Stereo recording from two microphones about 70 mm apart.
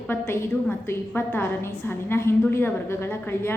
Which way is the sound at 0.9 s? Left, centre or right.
Left.